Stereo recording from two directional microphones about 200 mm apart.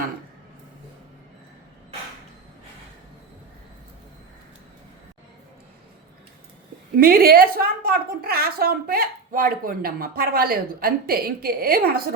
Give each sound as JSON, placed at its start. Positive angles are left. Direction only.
{"t": 7.0, "sound": "a woman's voice", "side_deg": -50}